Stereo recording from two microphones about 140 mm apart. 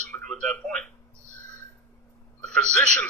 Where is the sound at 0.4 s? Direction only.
5° left (ahead or behind).